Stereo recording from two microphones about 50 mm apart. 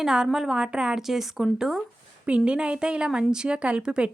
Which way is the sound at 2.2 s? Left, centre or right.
Right.